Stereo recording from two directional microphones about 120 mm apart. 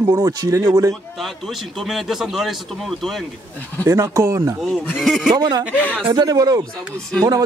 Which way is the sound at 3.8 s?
25° right (ahead or behind).